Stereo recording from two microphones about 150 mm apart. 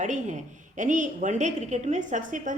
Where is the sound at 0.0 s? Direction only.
55° right (ahead or behind).